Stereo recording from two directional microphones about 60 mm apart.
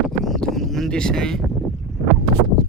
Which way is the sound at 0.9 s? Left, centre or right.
Centre.